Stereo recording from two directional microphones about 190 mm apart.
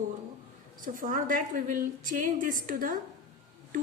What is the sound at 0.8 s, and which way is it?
A woman's voice, 45° right (ahead or behind).